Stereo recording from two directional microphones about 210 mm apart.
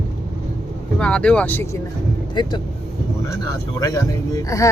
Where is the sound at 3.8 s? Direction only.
15° left (ahead or behind).